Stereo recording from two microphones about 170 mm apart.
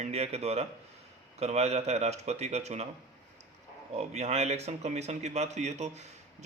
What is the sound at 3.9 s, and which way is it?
Speech, 40° right (ahead or behind).